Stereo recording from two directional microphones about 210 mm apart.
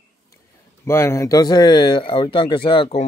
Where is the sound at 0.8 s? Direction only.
10° left (ahead or behind).